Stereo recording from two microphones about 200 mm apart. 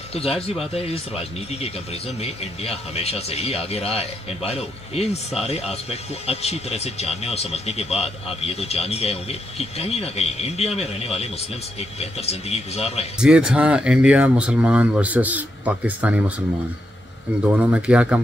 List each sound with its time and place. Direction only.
0.1 s speech: 30° left (ahead or behind)
13.2 s speech: 5° right (ahead or behind)
17.5 s speech: 10° right (ahead or behind)